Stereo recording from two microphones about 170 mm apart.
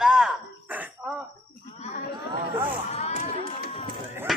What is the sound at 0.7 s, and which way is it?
Throat clearing, 10° right (ahead or behind).